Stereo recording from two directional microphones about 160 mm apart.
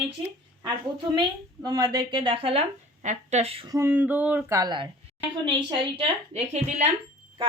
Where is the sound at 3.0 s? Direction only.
50° right (ahead or behind).